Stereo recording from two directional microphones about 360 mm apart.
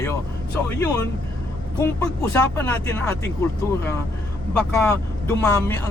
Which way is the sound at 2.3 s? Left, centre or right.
Centre.